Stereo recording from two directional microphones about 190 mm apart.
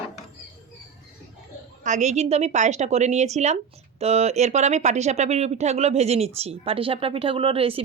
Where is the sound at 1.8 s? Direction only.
40° right (ahead or behind).